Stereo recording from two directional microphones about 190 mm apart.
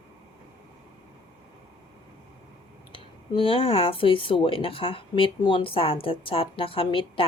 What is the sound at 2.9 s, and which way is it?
Speech, 30° left (ahead or behind).